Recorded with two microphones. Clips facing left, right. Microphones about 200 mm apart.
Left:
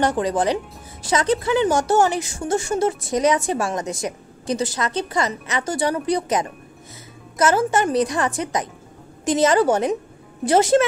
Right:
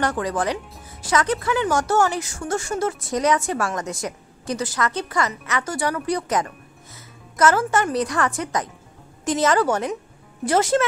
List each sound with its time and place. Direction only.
0.0 s speech: 25° left (ahead or behind)